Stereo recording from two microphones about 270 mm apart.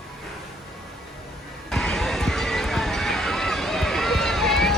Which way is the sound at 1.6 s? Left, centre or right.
Centre.